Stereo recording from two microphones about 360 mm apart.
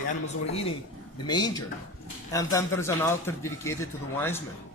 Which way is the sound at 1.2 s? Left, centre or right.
Centre.